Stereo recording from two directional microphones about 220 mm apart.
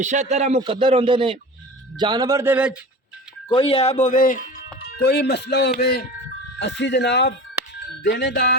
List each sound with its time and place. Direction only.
0.0 s a man's voice: 35° right (ahead or behind); by 2.7 s 10° right (ahead or behind)
3.5 s speech: 25° left (ahead or behind); by 8.5 s 55° left (ahead or behind)